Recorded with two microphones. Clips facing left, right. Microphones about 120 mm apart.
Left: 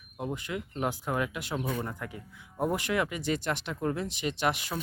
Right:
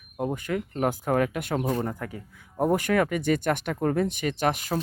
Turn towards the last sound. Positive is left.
turn(degrees=-45)  # may be behind; listen again after turning